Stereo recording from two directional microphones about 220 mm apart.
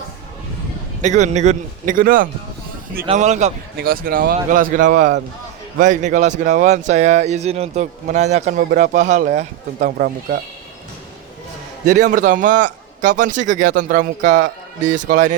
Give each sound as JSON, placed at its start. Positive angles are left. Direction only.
{"t": 1.0, "sound": "speech", "side_deg": -30}
{"t": 3.8, "sound": "speech", "side_deg": -45}
{"t": 11.9, "sound": "speech", "side_deg": -35}